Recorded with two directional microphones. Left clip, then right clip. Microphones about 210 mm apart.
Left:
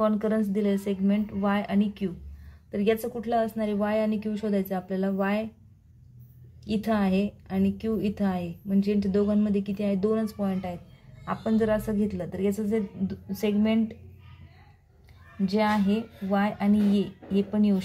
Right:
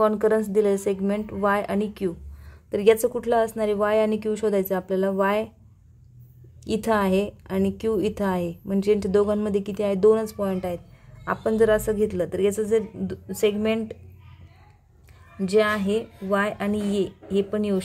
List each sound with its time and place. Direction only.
0.0 s a woman's voice: 50° right (ahead or behind)
6.6 s a woman's voice: 50° right (ahead or behind)
15.4 s a woman's voice: 45° right (ahead or behind)